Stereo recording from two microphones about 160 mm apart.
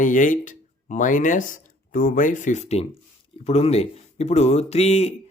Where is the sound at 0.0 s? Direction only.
55° left (ahead or behind).